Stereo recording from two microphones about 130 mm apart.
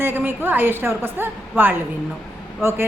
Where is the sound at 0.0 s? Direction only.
15° right (ahead or behind).